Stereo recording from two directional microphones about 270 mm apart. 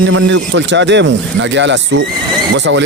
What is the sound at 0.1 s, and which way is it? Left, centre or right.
Speech, right.